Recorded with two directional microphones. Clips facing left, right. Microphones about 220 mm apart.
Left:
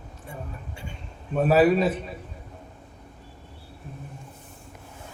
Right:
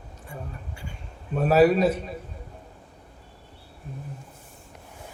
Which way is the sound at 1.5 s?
40° right (ahead or behind).